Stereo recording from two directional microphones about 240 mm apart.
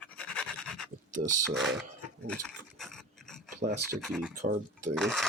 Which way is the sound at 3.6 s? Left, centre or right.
Right.